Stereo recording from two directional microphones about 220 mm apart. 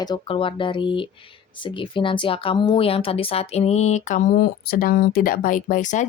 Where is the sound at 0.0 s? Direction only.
20° left (ahead or behind).